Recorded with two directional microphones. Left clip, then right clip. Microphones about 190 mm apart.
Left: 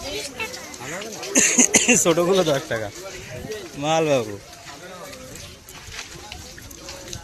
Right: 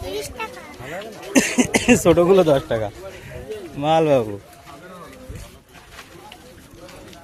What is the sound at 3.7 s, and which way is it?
Speech, 20° right (ahead or behind).